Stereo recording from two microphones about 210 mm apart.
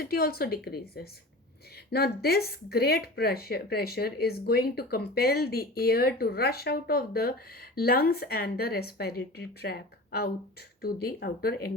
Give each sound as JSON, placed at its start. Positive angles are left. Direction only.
{"t": 0.0, "sound": "speech", "side_deg": 45}